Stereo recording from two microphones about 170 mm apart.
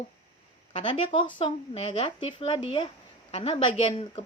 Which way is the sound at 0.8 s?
30° left (ahead or behind).